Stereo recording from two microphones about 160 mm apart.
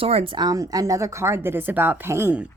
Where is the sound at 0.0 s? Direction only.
40° right (ahead or behind).